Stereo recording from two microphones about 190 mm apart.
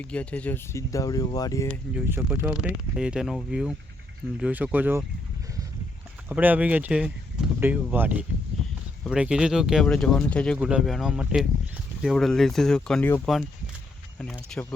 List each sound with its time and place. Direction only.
0.0 s speech: 5° left (ahead or behind)
2.0 s speech: 10° right (ahead or behind)
6.2 s speech: 10° right (ahead or behind); by 13.2 s 10° left (ahead or behind)
14.5 s speech: 5° left (ahead or behind)